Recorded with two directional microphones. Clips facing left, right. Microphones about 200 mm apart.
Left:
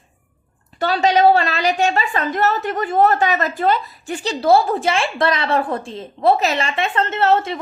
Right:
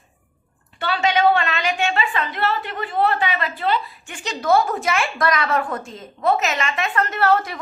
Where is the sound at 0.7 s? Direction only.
40° left (ahead or behind).